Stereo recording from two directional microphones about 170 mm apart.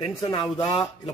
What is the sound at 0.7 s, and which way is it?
Speech, 20° left (ahead or behind).